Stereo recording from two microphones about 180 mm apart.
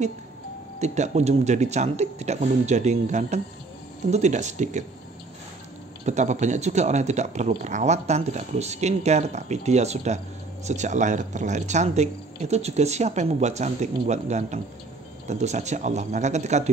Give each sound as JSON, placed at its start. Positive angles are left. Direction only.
{"t": 0.7, "sound": "speech", "side_deg": -40}
{"t": 6.0, "sound": "speech", "side_deg": -40}